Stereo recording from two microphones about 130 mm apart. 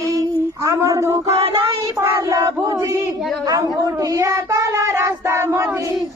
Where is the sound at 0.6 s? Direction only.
20° right (ahead or behind).